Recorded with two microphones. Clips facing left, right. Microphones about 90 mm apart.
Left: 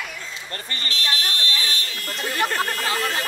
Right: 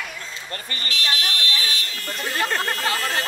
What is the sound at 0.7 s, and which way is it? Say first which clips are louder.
Buzzer: even; 35° left (ahead or behind).